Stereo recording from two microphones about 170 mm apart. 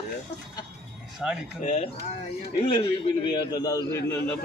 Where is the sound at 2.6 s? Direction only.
30° left (ahead or behind); by 4.3 s 15° left (ahead or behind).